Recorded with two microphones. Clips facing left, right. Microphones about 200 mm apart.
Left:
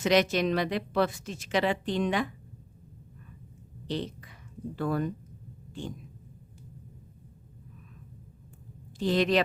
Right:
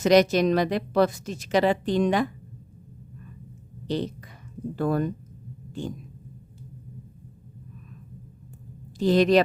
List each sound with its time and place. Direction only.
0.0 s a woman's voice: 40° right (ahead or behind)
3.8 s speech: 40° right (ahead or behind)
9.0 s a woman's voice: 40° right (ahead or behind)